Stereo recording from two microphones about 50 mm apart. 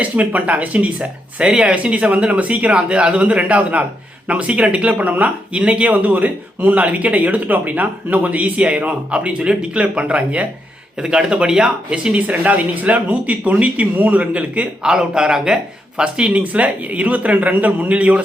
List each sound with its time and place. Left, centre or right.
0.0 s speech: right
1.5 s speech: centre
1.7 s speech: right
11.0 s speech: centre
12.1 s speech: right
14.8 s speech: centre
16.0 s speech: right